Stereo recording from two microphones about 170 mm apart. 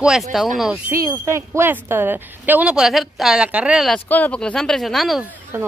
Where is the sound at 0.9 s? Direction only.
20° right (ahead or behind); by 4.0 s 5° right (ahead or behind).